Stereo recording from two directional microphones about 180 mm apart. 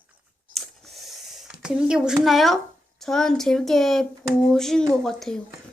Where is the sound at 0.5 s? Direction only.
Centre (ahead or behind).